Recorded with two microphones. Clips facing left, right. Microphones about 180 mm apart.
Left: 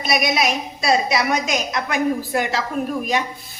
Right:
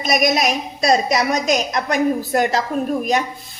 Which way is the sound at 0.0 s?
45° right (ahead or behind).